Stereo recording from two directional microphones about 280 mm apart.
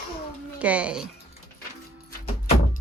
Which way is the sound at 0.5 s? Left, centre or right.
Centre.